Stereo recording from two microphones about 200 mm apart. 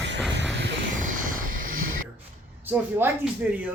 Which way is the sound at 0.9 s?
45° right (ahead or behind).